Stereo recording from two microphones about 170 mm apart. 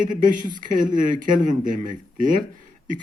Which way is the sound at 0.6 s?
50° right (ahead or behind).